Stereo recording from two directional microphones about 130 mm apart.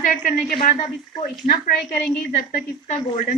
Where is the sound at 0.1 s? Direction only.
90° left.